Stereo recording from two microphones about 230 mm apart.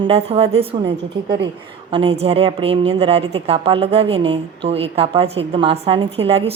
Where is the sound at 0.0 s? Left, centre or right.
Right.